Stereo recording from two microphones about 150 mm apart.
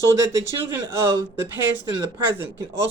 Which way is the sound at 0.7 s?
20° right (ahead or behind).